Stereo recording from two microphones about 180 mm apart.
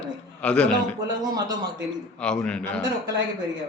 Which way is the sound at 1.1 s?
20° right (ahead or behind).